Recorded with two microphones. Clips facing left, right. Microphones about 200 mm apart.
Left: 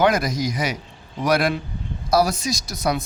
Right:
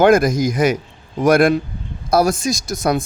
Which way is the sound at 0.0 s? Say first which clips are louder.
Right 7 dB; 50° right (ahead or behind).